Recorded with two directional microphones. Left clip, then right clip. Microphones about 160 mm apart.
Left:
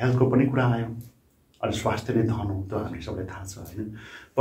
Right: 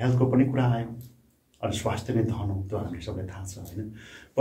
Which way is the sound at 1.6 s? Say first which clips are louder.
Left 3 dB; 25° right (ahead or behind).